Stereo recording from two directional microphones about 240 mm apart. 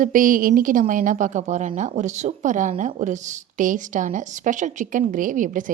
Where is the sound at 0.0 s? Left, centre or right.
Right.